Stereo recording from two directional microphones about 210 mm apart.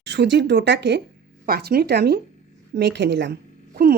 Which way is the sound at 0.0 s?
55° right (ahead or behind).